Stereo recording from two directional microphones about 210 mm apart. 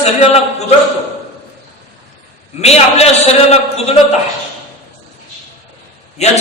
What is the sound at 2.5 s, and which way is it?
A man's voice, 30° left (ahead or behind).